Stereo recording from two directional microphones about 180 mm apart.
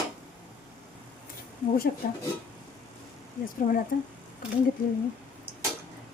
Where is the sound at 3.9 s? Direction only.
60° left (ahead or behind).